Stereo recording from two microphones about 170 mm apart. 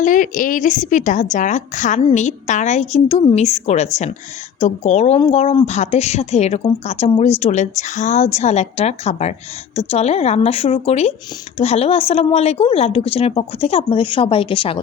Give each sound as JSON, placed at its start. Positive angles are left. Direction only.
{"t": 0.0, "sound": "a woman's voice", "side_deg": 50}